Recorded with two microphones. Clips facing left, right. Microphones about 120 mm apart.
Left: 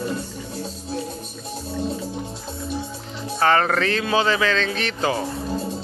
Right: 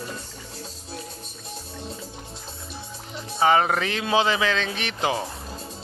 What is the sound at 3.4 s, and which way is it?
Speech, 10° right (ahead or behind).